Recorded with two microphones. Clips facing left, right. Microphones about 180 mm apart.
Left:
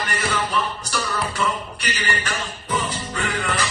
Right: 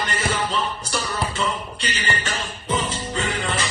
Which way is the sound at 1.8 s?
25° right (ahead or behind).